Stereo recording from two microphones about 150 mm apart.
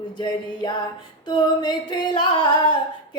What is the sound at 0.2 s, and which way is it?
Female singing, 30° left (ahead or behind).